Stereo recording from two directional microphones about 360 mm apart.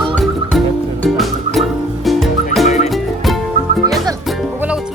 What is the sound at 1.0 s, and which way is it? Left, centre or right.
Frog, centre.